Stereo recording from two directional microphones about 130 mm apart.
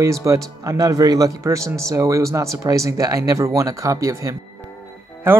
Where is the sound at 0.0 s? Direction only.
25° right (ahead or behind).